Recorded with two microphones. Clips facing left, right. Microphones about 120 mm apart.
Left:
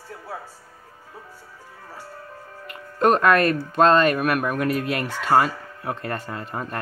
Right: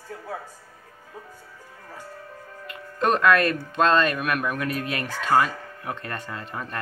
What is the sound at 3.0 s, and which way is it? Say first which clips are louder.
Speech: left 2 dB; 35° left (ahead or behind).